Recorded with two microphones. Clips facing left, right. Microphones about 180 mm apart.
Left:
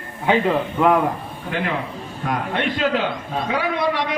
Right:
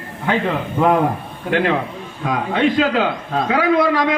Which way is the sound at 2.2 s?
90° right.